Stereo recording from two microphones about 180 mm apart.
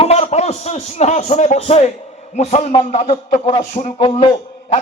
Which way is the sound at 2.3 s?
40° left (ahead or behind).